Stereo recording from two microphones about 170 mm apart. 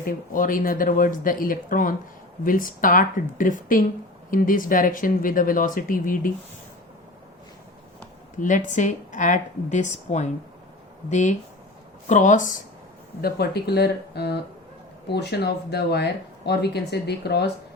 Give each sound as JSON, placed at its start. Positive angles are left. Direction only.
{"t": 0.0, "sound": "speech", "side_deg": 55}
{"t": 8.4, "sound": "speech", "side_deg": 50}
{"t": 13.2, "sound": "speech", "side_deg": 70}